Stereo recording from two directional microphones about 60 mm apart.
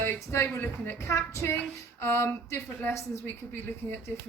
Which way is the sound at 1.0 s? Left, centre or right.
Left.